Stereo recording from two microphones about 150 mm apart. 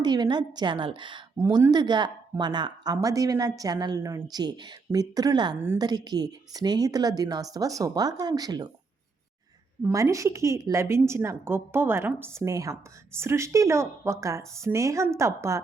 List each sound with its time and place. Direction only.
0.0 s a woman's voice: 30° right (ahead or behind)
9.8 s a woman's voice: 20° right (ahead or behind)